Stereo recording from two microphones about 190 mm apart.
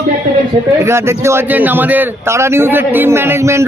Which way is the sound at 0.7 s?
15° right (ahead or behind).